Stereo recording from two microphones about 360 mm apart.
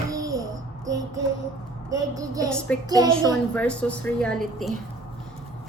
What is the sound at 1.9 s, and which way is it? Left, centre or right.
Speech, centre.